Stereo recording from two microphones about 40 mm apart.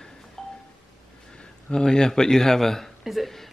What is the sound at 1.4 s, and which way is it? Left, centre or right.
A man's voice, centre.